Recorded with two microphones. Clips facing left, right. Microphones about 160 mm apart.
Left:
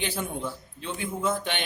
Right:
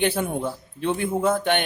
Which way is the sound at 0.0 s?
60° right (ahead or behind).